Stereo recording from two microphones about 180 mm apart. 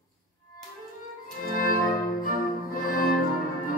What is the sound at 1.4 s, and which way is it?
Music, 50° left (ahead or behind).